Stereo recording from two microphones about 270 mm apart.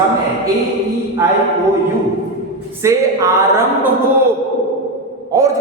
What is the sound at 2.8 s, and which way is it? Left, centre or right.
Speech, centre.